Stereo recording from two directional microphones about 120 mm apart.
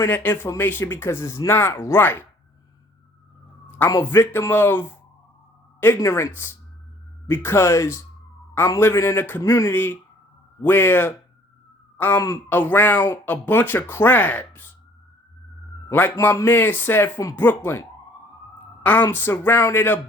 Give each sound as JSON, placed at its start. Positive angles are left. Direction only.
{"t": 0.0, "sound": "speech", "side_deg": 15}
{"t": 4.0, "sound": "speech", "side_deg": 20}
{"t": 15.9, "sound": "a woman's voice", "side_deg": 20}